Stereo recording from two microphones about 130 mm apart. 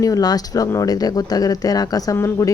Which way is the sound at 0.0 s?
30° left (ahead or behind).